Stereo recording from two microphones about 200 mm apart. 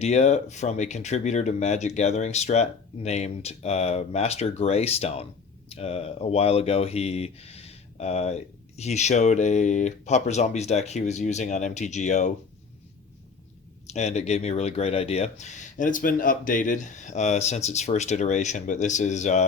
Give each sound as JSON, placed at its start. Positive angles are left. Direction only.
{"t": 0.0, "sound": "speech", "side_deg": 35}
{"t": 13.8, "sound": "speech", "side_deg": 35}